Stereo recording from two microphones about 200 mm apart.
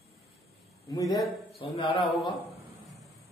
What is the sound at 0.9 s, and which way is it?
A man's voice, 20° left (ahead or behind).